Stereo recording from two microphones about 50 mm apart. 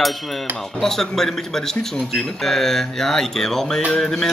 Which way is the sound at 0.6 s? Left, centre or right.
Centre.